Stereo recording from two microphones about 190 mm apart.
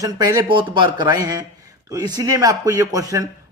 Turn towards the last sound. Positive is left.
turn(degrees=-20)  # may be behind; listen again after turning